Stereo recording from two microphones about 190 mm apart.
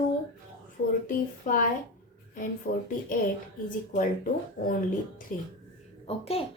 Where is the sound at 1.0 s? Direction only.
45° left (ahead or behind).